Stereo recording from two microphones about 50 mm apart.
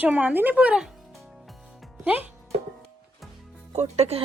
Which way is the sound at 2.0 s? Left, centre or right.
Right.